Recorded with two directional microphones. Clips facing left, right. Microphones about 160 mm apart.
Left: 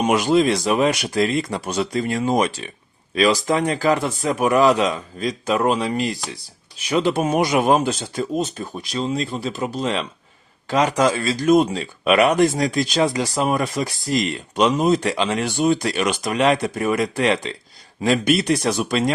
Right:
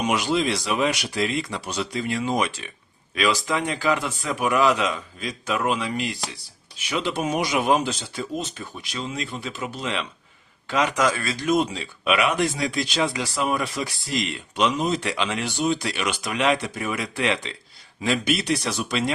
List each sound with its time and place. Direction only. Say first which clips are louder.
0.0 s speech: left 6 dB; 45° left (ahead or behind); by 11.4 s 30° left (ahead or behind)
11.4 s speech: left 6 dB; 50° left (ahead or behind)